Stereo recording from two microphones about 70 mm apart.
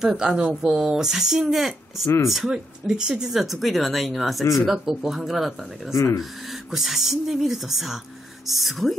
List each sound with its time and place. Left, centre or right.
0.0 s speech: centre
5.9 s speech: left
6.5 s speech: centre